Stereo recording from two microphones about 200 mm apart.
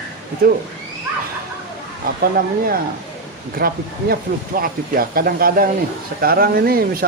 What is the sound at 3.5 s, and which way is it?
Speech, 50° right (ahead or behind).